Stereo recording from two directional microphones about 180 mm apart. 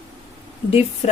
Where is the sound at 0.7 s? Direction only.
35° left (ahead or behind).